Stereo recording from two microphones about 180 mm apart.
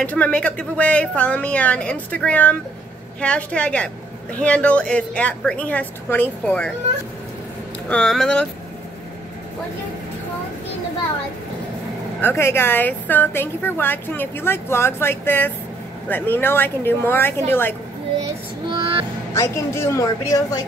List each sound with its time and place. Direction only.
0.0 s a woman's voice: 10° left (ahead or behind)
7.9 s speech: 5° left (ahead or behind)
12.2 s a woman's voice: 10° left (ahead or behind)
18.7 s music: 30° right (ahead or behind)
19.3 s a woman's voice: 15° left (ahead or behind)